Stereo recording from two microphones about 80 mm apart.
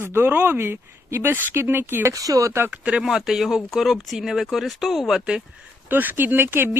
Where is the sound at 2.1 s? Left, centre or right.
Right.